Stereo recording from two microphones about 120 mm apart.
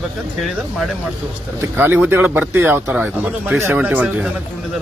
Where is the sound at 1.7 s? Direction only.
15° right (ahead or behind).